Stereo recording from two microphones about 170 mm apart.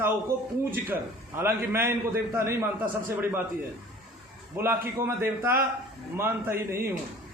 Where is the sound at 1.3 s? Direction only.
15° right (ahead or behind).